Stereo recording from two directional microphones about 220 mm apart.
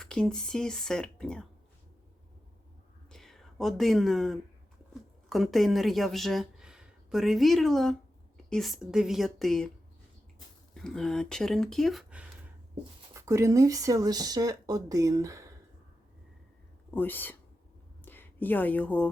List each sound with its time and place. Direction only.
0.0 s speech: 5° left (ahead or behind)
3.1 s a sound: centre (ahead or behind)
5.3 s speech: centre (ahead or behind)
10.8 s speech: centre (ahead or behind)
13.1 s speech: 15° right (ahead or behind)
16.9 s speech: 10° left (ahead or behind)